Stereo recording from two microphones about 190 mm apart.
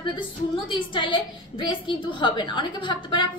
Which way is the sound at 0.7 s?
25° left (ahead or behind).